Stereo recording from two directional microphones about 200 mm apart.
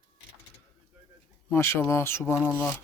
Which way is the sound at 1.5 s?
10° left (ahead or behind).